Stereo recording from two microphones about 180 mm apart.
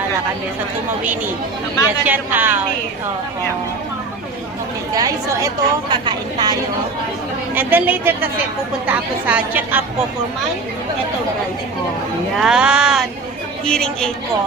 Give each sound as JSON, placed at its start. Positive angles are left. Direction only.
{"t": 2.0, "sound": "a woman's voice", "side_deg": -10}
{"t": 4.9, "sound": "a woman's voice", "side_deg": -20}
{"t": 7.5, "sound": "a woman's voice", "side_deg": -10}
{"t": 12.4, "sound": "speech", "side_deg": -5}